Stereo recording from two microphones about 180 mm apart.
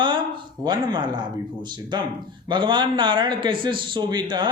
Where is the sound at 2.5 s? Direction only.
25° right (ahead or behind).